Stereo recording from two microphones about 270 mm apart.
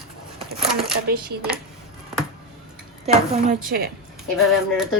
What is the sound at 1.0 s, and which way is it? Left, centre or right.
Speech, right.